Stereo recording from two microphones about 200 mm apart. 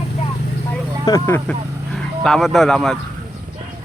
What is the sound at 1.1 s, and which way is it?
Speech, 15° left (ahead or behind).